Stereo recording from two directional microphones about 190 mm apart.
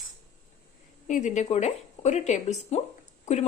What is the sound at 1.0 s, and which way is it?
Speech, 40° left (ahead or behind).